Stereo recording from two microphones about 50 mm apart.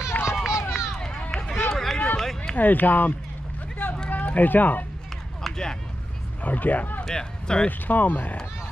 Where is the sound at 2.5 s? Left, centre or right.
Left.